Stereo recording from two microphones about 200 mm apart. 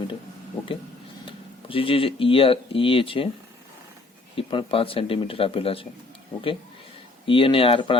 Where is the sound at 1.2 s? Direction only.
25° left (ahead or behind).